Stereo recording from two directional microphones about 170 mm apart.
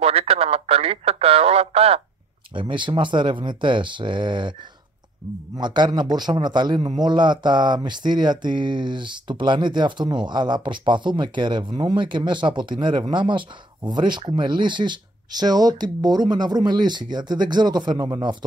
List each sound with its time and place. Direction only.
0.0 s speech: 35° right (ahead or behind)
5.6 s speech: 25° right (ahead or behind)